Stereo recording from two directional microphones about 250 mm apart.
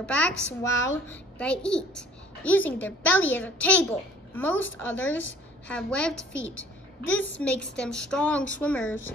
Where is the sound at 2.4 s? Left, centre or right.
Centre.